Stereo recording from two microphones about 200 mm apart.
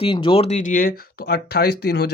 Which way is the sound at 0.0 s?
25° left (ahead or behind).